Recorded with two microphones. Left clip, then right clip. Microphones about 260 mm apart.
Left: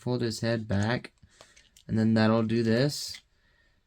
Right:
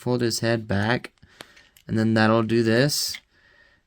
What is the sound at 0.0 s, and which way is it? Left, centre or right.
Speech, right.